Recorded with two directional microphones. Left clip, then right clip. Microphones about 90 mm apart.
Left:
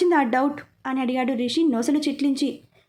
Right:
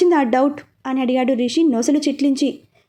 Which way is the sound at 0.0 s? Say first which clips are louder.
Right 5 dB; 20° right (ahead or behind).